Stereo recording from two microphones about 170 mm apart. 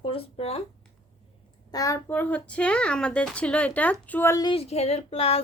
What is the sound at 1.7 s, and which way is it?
A woman's voice, 20° left (ahead or behind).